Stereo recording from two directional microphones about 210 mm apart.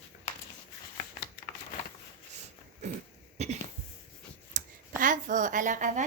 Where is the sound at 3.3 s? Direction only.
30° right (ahead or behind).